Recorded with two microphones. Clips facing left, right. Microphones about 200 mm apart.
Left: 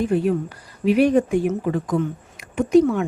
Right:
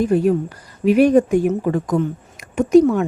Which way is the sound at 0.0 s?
40° right (ahead or behind).